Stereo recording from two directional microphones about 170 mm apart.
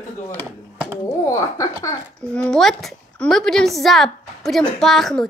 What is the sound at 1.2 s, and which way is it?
Speech, 20° left (ahead or behind).